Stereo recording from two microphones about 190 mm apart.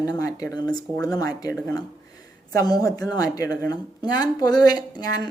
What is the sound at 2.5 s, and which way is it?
A woman's voice, 20° left (ahead or behind).